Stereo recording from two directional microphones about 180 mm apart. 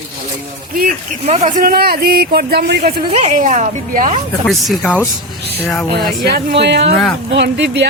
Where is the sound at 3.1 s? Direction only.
40° right (ahead or behind).